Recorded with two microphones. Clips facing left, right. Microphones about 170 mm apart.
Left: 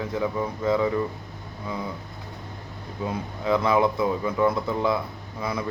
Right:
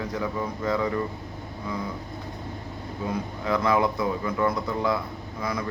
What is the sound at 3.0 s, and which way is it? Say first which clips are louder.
Speech: left 2 dB; 20° left (ahead or behind).